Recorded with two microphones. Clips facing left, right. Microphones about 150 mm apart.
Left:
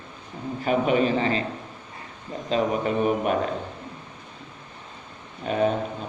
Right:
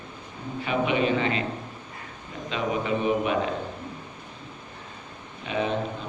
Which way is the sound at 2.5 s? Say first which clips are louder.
Left 3 dB; 45° left (ahead or behind).